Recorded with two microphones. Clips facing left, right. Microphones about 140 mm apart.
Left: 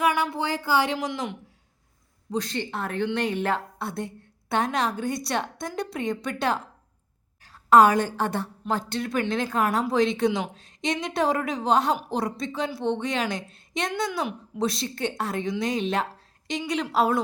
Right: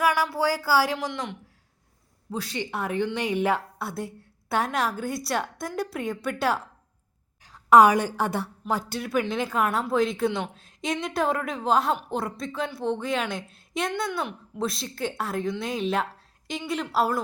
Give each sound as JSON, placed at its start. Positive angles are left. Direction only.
{"t": 0.0, "sound": "a woman's voice", "side_deg": 0}
{"t": 2.3, "sound": "a woman's voice", "side_deg": -10}